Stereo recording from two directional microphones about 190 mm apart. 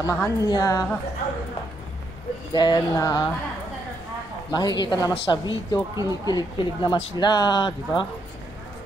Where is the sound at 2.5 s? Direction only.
20° left (ahead or behind).